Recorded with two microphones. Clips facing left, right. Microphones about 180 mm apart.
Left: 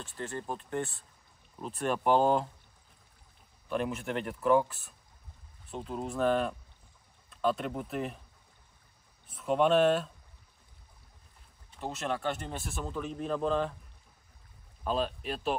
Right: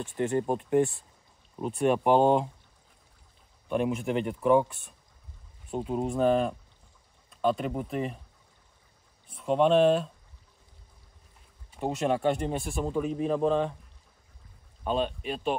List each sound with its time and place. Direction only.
0.0 s speech: 10° right (ahead or behind)
1.6 s speech: centre (ahead or behind)
3.6 s speech: centre (ahead or behind)
5.7 s speech: 35° right (ahead or behind)
6.0 s speech: centre (ahead or behind)
9.3 s speech: centre (ahead or behind)
12.0 s speech: 15° right (ahead or behind)
12.4 s speech: centre (ahead or behind)
14.9 s speech: centre (ahead or behind)